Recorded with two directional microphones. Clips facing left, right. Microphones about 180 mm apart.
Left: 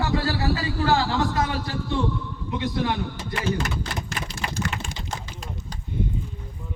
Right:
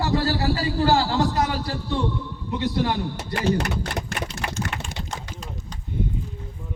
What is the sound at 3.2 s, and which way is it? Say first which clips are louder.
Typing: right 3 dB; 65° right (ahead or behind).